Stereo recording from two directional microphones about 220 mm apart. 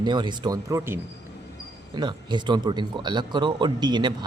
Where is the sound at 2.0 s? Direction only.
20° right (ahead or behind).